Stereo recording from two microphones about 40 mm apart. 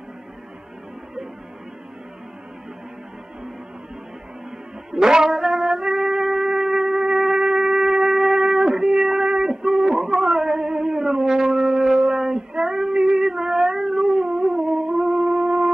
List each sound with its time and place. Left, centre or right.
4.9 s speech: centre
5.3 s music: centre
15.0 s wind instrument: centre